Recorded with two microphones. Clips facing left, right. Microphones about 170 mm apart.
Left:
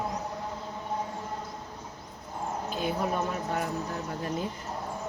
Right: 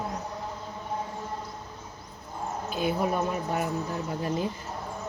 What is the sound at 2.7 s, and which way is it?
Speech, 10° right (ahead or behind).